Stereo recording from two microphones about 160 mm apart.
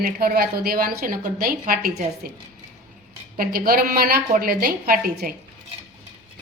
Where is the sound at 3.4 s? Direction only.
65° right (ahead or behind).